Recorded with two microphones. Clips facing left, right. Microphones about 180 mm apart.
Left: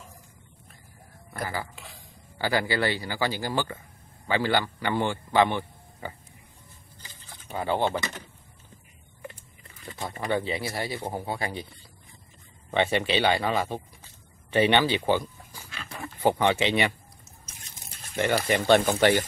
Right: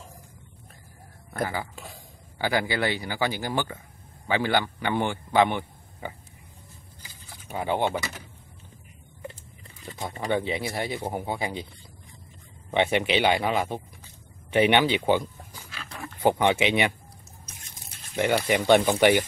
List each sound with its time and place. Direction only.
1.4 s speech: 20° right (ahead or behind)
7.0 s a sound: 10° right (ahead or behind)
9.9 s speech: 20° right (ahead or behind)
12.7 s speech: 15° right (ahead or behind)
15.7 s dog: centre (ahead or behind)
16.2 s speech: 15° right (ahead or behind)
18.1 s speech: 10° right (ahead or behind)